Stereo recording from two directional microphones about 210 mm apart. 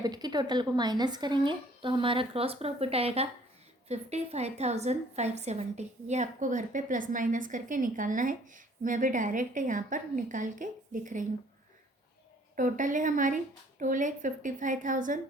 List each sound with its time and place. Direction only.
0.0 s a woman's voice: 20° right (ahead or behind); by 11.3 s 40° right (ahead or behind)
12.5 s a woman's voice: 40° right (ahead or behind)